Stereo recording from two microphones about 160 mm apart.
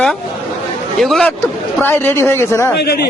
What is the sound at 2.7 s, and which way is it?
Speech, 90° left.